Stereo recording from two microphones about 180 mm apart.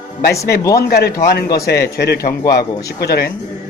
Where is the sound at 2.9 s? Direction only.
65° left (ahead or behind).